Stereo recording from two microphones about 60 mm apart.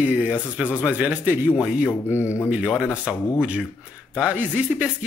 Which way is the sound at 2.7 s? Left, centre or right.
Centre.